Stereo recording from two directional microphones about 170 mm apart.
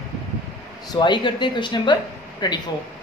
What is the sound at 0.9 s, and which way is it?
Speech, 25° left (ahead or behind).